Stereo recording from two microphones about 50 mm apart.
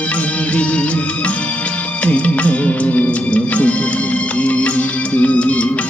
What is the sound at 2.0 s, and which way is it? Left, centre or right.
Music, left.